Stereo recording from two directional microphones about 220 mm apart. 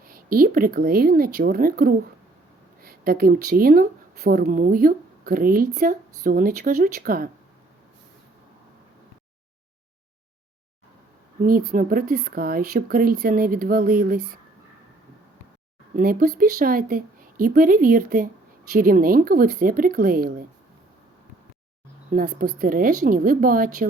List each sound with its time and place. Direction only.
0.0 s speech: 40° right (ahead or behind)
11.7 s speech: 40° right (ahead or behind)
16.0 s speech: 40° right (ahead or behind)
22.1 s speech: 40° right (ahead or behind)